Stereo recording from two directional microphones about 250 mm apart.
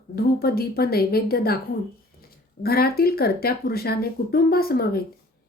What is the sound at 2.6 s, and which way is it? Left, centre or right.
Speech, left.